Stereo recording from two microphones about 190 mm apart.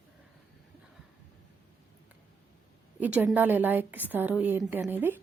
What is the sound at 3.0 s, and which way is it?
Speech, 10° right (ahead or behind).